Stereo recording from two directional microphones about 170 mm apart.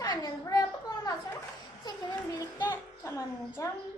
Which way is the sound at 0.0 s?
20° left (ahead or behind).